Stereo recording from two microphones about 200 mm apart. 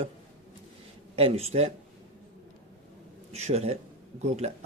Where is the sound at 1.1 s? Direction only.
30° right (ahead or behind).